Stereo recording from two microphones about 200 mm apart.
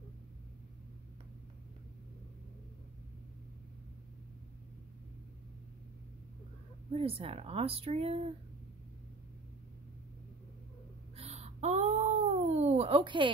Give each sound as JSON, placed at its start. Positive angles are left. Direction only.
{"t": 6.9, "sound": "a woman's voice", "side_deg": -30}
{"t": 11.1, "sound": "wail", "side_deg": -30}